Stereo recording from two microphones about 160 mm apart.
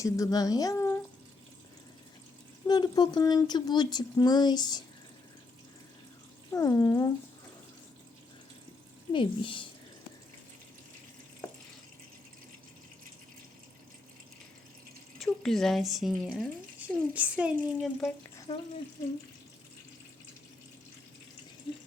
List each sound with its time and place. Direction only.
0.0 s speech: 20° left (ahead or behind)
2.6 s speech: 25° left (ahead or behind)
6.5 s speech: 20° left (ahead or behind)
9.1 s speech: 30° left (ahead or behind)
15.2 s a child's voice: centre (ahead or behind)
18.5 s speech: 35° left (ahead or behind)